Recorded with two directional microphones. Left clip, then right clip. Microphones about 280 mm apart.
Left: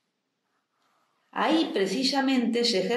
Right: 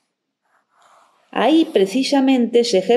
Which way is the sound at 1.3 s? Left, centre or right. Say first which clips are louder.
Right 9 dB; right.